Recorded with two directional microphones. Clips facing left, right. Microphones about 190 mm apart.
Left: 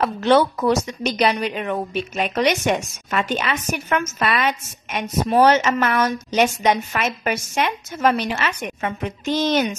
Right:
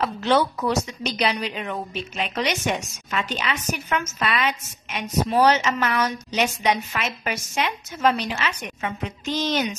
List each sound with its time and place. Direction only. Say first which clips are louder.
0.0 s a woman's voice: left 4 dB; 55° left (ahead or behind)